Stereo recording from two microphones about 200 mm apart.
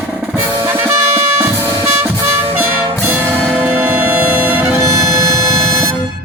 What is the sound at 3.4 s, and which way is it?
Music, centre (ahead or behind).